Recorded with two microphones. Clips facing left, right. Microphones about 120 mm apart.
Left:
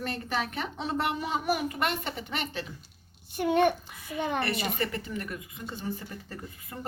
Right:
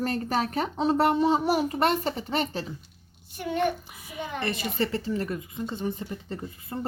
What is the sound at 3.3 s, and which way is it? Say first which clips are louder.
Child singing: left 3 dB; 60° left (ahead or behind).